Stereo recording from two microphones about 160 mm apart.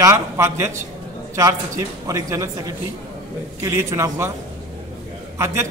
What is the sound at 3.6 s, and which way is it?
Speech, 15° right (ahead or behind).